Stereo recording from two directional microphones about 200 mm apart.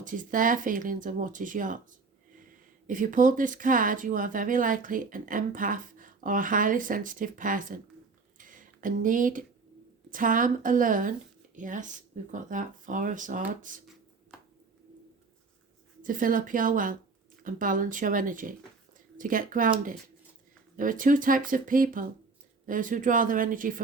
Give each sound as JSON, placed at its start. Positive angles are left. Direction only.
{"t": 0.0, "sound": "speech", "side_deg": -40}
{"t": 2.8, "sound": "speech", "side_deg": -40}
{"t": 8.4, "sound": "a sound", "side_deg": -40}
{"t": 10.1, "sound": "speech", "side_deg": -40}
{"t": 14.3, "sound": "a sound", "side_deg": -5}
{"t": 16.0, "sound": "speech", "side_deg": -40}
{"t": 20.7, "sound": "speech", "side_deg": -40}